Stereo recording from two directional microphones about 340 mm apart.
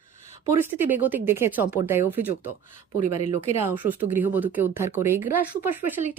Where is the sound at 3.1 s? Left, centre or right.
Centre.